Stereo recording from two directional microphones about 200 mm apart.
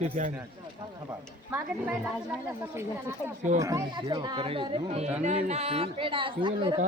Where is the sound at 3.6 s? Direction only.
15° right (ahead or behind).